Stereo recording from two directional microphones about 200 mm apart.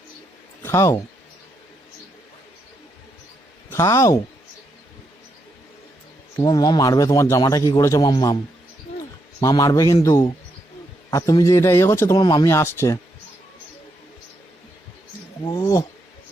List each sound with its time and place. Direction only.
0.6 s speech: 15° left (ahead or behind)
3.7 s speech: 15° left (ahead or behind)
6.3 s a man's voice: 20° left (ahead or behind)
9.4 s a man's voice: 15° left (ahead or behind)
15.4 s speech: 20° left (ahead or behind)